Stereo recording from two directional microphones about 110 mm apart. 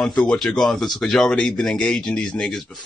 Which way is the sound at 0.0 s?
10° left (ahead or behind).